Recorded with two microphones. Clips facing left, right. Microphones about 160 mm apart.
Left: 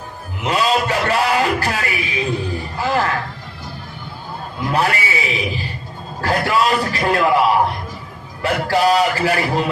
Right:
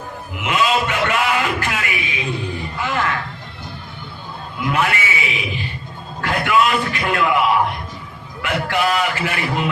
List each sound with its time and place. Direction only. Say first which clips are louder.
0.4 s a sound: left 1 dB; 35° left (ahead or behind)
2.8 s music: left 3 dB; 35° left (ahead or behind)
4.6 s a man's voice: left 1 dB; 35° left (ahead or behind)